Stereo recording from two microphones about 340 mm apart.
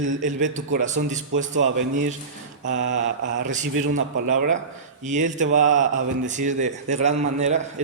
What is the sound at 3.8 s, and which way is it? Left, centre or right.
A man's voice, right.